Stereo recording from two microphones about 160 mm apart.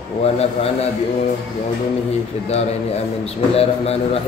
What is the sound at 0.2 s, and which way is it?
Speech, 40° left (ahead or behind).